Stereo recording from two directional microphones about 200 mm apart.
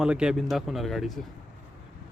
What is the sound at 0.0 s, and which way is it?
Speech, 5° right (ahead or behind).